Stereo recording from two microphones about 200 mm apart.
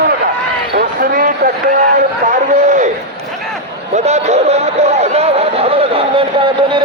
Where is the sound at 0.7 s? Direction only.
45° right (ahead or behind).